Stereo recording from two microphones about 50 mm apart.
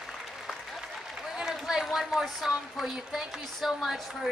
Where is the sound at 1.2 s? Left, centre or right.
Centre.